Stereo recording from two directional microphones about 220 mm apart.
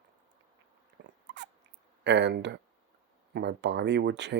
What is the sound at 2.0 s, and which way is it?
Speech, 55° right (ahead or behind).